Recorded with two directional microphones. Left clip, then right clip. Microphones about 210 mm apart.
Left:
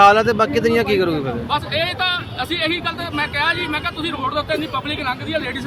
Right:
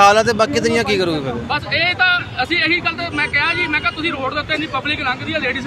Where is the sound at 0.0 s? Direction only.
10° left (ahead or behind).